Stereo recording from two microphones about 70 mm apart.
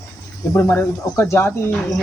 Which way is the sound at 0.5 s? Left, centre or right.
Left.